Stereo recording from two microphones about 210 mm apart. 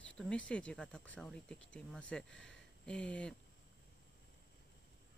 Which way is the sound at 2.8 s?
5° left (ahead or behind).